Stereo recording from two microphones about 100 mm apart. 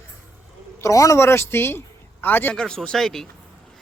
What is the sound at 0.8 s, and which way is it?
Speech, 30° left (ahead or behind).